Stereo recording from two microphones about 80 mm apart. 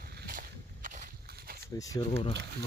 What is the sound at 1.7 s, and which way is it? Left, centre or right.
Speech, left.